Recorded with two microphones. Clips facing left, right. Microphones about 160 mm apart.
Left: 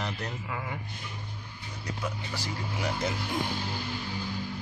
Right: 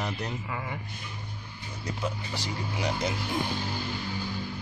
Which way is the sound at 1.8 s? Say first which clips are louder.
Right 2 dB; 20° right (ahead or behind).